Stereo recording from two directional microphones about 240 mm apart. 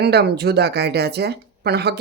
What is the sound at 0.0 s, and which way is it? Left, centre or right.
Speech, right.